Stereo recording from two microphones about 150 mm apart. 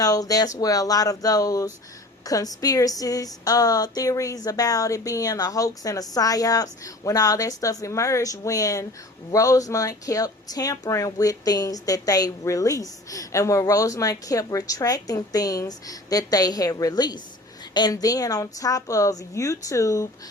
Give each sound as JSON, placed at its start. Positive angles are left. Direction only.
{"t": 0.0, "sound": "speech", "side_deg": 25}